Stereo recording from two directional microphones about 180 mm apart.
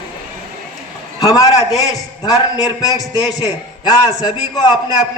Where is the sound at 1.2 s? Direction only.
20° left (ahead or behind).